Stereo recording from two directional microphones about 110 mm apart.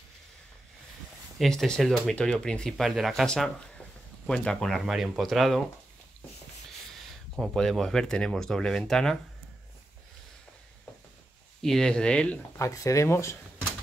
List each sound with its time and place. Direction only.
1.6 s speech: 5° left (ahead or behind)
7.3 s speech: centre (ahead or behind)
11.6 s speech: 5° left (ahead or behind)
12.5 s speech: 30° left (ahead or behind)